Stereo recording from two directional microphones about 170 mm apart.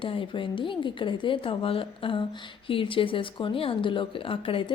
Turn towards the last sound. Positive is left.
turn(degrees=30)  # may be behind; listen again after turning